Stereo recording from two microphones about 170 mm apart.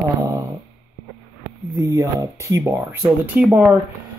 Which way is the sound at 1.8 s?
15° right (ahead or behind).